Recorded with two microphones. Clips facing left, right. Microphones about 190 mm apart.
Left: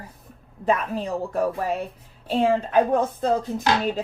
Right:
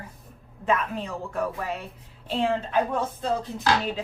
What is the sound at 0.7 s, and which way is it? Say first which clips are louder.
A woman's voice: left 3 dB; 40° left (ahead or behind).